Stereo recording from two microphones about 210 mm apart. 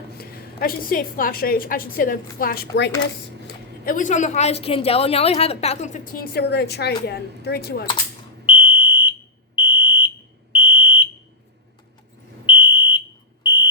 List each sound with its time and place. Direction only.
0.2 s a woman's voice: 45° left (ahead or behind)
8.4 s fire alarm: 25° left (ahead or behind)
12.5 s fire alarm: 20° left (ahead or behind)
13.4 s smoke detector: 20° left (ahead or behind)